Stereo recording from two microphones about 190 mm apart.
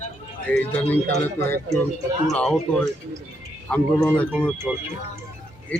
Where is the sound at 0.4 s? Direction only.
10° left (ahead or behind).